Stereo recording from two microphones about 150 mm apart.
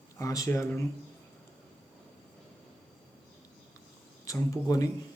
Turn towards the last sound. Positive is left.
turn(degrees=25)  # may be behind; listen again after turning